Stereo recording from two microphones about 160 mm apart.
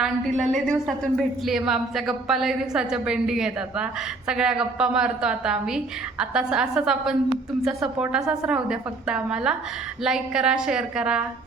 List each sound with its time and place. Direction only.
0.0 s a woman's voice: centre (ahead or behind)